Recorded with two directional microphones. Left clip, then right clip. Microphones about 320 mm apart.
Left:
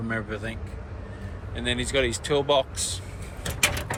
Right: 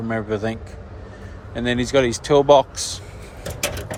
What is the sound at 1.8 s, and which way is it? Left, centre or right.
Speech, centre.